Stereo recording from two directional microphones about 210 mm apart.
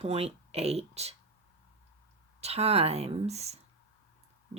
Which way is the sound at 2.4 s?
30° right (ahead or behind).